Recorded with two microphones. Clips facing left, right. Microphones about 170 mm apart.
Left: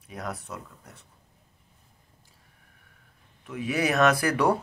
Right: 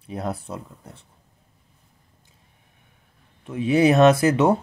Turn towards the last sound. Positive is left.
turn(degrees=-20)  # may be behind; listen again after turning